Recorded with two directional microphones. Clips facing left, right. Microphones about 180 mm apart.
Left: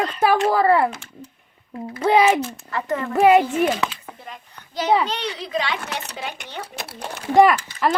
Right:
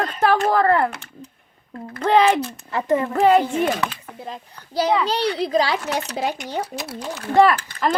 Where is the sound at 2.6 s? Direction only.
25° right (ahead or behind).